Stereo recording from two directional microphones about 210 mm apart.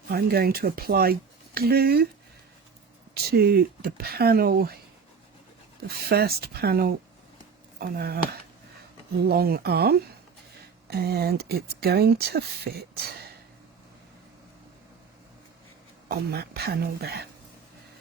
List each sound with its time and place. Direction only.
0.1 s speech: 45° right (ahead or behind)
3.2 s speech: 45° right (ahead or behind)
5.9 s speech: 50° right (ahead or behind)
16.0 s speech: 50° right (ahead or behind)